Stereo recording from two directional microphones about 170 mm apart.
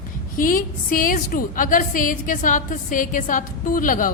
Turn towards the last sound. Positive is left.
turn(degrees=55)  # may be behind; listen again after turning